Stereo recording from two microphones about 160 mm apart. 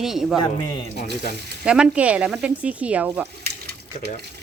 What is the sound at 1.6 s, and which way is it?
A woman's voice, 5° right (ahead or behind).